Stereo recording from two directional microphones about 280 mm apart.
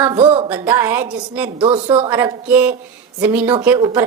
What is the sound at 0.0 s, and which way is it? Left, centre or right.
Speech, centre.